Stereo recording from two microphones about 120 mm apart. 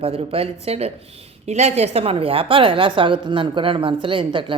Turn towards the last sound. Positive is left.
turn(degrees=-45)  # may be behind; listen again after turning